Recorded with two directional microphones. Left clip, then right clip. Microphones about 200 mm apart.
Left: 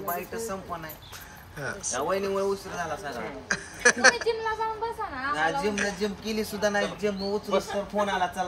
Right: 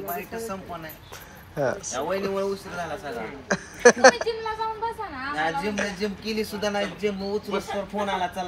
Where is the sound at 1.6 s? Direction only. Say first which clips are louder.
Right 5 dB; centre (ahead or behind).